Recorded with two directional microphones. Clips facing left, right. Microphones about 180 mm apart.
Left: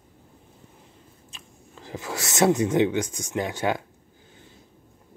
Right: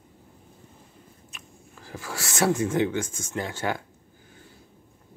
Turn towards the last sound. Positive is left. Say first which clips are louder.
# left 3 dB
turn(degrees=15)  # may be behind; listen again after turning